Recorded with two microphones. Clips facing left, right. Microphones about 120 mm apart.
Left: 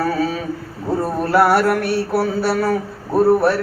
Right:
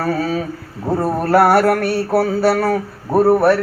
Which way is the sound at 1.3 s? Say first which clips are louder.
Right 2 dB; 50° right (ahead or behind).